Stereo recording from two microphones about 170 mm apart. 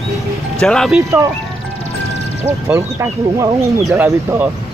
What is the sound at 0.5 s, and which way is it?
Speech, 5° left (ahead or behind).